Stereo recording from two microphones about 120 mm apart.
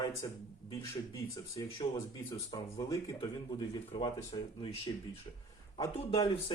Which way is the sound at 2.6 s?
25° left (ahead or behind).